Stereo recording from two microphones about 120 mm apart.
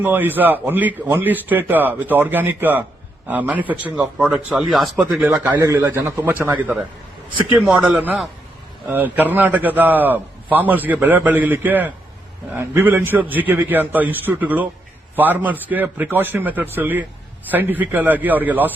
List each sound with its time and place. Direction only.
0.0 s a man's voice: 15° right (ahead or behind)
5.2 s a man's voice: 15° right (ahead or behind)